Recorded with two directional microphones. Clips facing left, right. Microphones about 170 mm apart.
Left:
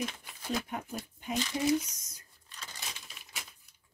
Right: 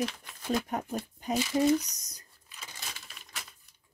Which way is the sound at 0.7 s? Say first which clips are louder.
Right 5 dB; 40° right (ahead or behind).